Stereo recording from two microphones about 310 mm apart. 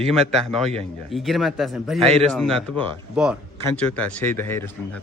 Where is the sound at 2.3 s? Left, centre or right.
Centre.